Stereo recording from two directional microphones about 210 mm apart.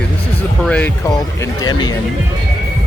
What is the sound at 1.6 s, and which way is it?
Speech, 20° left (ahead or behind).